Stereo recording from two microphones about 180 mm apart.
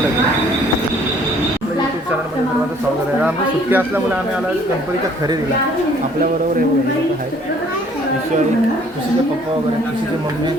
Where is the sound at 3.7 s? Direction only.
10° right (ahead or behind).